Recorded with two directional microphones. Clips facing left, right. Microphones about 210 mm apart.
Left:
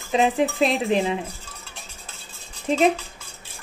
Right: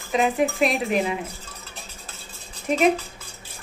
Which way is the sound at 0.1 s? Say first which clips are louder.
Left 1 dB; 30° left (ahead or behind).